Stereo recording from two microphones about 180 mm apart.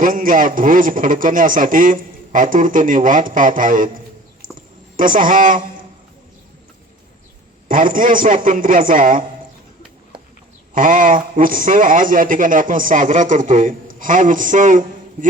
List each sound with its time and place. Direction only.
0.0 s a man's voice: 50° right (ahead or behind)
4.9 s a man's voice: 50° right (ahead or behind)
7.7 s a man's voice: 50° right (ahead or behind)
10.8 s a man's voice: 50° right (ahead or behind)